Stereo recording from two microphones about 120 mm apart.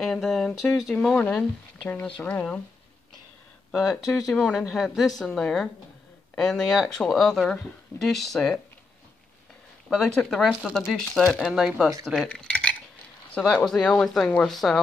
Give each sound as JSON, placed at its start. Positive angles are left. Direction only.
{"t": 0.0, "sound": "speech", "side_deg": 0}
{"t": 3.7, "sound": "speech", "side_deg": 0}
{"t": 9.8, "sound": "speech", "side_deg": 5}
{"t": 12.3, "sound": "cutlery", "side_deg": 10}
{"t": 13.3, "sound": "speech", "side_deg": 5}